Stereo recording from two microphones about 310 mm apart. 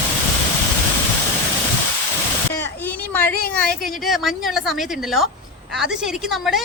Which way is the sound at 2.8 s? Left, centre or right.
Centre.